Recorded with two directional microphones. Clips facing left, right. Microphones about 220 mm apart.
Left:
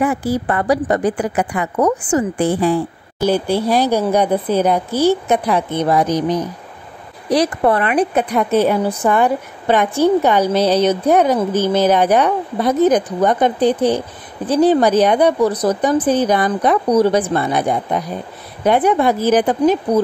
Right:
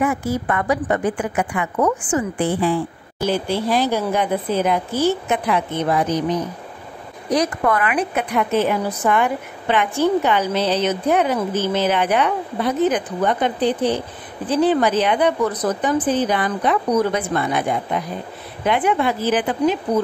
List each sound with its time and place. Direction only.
0.0 s a woman's voice: 35° left (ahead or behind)
7.2 s a woman's voice: 35° left (ahead or behind)